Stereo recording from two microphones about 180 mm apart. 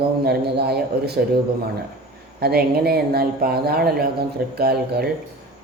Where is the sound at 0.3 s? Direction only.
65° right (ahead or behind).